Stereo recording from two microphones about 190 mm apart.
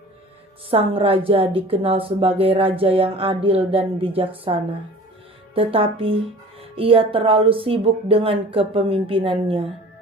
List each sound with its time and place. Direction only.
0.7 s a woman's voice: 30° right (ahead or behind)